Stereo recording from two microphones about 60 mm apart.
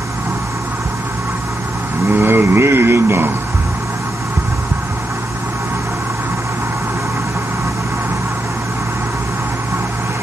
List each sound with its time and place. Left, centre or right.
2.0 s speech: right